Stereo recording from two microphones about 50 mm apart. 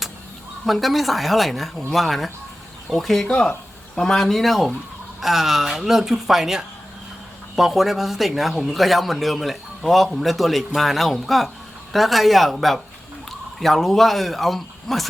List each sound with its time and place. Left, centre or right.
0.6 s a man's voice: centre
3.2 s a man's voice: centre